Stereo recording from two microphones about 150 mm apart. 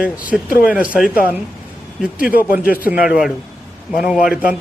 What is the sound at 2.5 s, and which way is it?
Speech, 70° left (ahead or behind).